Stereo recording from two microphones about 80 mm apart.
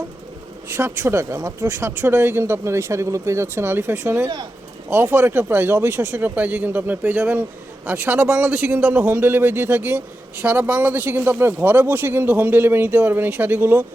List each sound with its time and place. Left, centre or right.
0.7 s speech: right
1.6 s a man's voice: right
2.4 s a man's voice: right